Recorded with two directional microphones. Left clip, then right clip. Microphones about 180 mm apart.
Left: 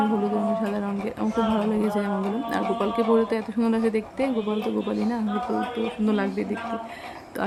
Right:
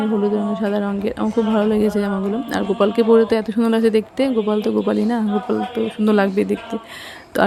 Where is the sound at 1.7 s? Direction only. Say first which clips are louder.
Right 6 dB; 30° right (ahead or behind).